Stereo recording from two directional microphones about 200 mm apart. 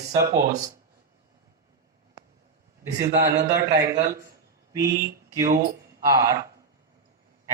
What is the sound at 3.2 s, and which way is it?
Speech, 50° right (ahead or behind).